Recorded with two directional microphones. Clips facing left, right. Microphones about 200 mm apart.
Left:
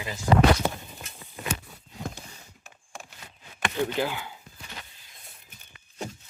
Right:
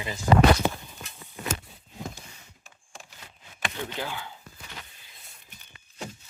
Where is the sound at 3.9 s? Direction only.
15° left (ahead or behind).